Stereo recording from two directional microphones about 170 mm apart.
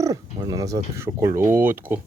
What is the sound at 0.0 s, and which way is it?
Speech, 20° right (ahead or behind).